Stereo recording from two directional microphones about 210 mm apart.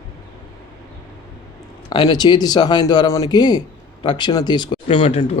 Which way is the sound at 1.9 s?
20° left (ahead or behind).